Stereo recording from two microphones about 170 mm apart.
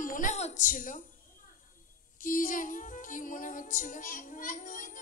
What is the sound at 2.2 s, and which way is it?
Music, 50° left (ahead or behind).